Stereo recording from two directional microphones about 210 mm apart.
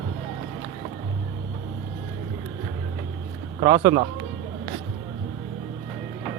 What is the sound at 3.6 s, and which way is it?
Speech, 20° right (ahead or behind).